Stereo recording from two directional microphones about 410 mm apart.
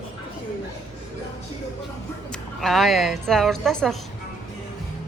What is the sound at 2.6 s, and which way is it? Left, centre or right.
Speech, centre.